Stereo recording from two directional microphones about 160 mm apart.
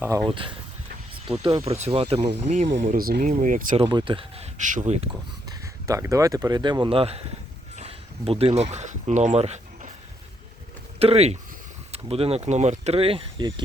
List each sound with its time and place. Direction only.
0.3 s speech: 35° right (ahead or behind)
1.6 s speech: 40° right (ahead or behind)
3.8 s speech: 35° right (ahead or behind)
4.5 s speech: 50° right (ahead or behind)
5.5 s speech: 20° right (ahead or behind); by 9.9 s 45° right (ahead or behind)
11.0 s speech: 40° right (ahead or behind)